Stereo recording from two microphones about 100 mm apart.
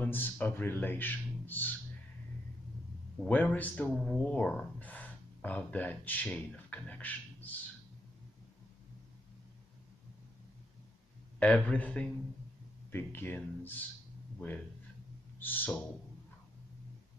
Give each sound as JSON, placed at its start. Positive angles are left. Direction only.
{"t": 0.0, "sound": "speech", "side_deg": 20}
{"t": 3.3, "sound": "speech", "side_deg": 15}
{"t": 11.3, "sound": "speech", "side_deg": 15}
{"t": 15.4, "sound": "speech", "side_deg": 20}